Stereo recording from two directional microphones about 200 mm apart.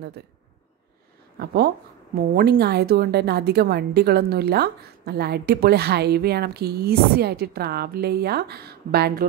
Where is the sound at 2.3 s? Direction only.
50° right (ahead or behind).